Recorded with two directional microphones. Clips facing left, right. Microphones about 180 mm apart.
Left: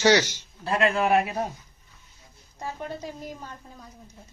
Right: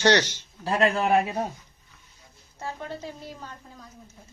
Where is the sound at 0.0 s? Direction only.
10° left (ahead or behind).